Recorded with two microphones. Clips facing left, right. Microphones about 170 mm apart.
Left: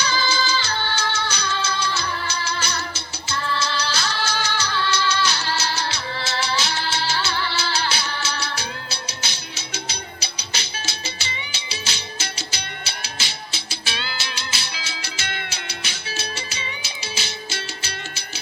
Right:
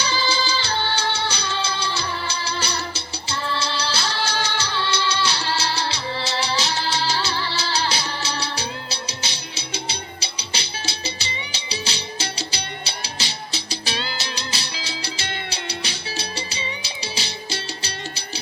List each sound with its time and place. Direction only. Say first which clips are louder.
0.0 s music: even; 30° right (ahead or behind)